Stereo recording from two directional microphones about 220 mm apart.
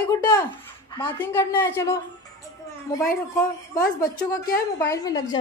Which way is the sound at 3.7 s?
15° left (ahead or behind).